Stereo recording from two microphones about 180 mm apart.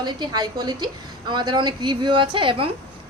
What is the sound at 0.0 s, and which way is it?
Speech, 25° right (ahead or behind).